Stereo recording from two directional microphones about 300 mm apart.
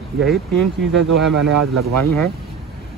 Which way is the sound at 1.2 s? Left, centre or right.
Centre.